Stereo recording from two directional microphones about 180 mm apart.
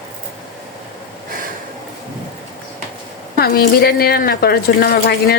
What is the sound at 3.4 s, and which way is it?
Speech, 60° left (ahead or behind).